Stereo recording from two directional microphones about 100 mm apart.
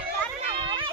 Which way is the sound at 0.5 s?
60° right (ahead or behind).